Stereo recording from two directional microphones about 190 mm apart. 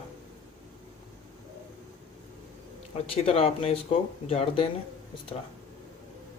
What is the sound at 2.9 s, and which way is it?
Speech, 30° left (ahead or behind).